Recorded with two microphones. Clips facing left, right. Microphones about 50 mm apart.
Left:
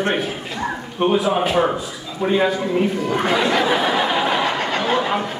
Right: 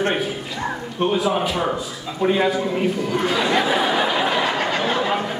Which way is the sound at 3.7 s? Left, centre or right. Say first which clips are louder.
Left 1 dB; centre.